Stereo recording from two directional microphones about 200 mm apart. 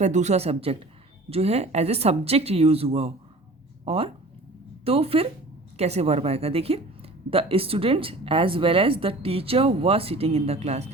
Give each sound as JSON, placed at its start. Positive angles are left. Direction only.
{"t": 0.0, "sound": "speech", "side_deg": -35}